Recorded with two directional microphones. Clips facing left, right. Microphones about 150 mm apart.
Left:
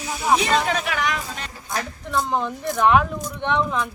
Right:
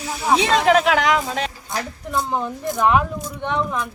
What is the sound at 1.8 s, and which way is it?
A woman's voice, 5° right (ahead or behind).